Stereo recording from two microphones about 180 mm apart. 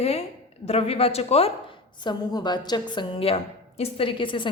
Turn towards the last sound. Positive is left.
turn(degrees=30)  # may be behind; listen again after turning